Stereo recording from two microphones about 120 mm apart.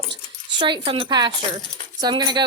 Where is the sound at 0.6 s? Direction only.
45° right (ahead or behind).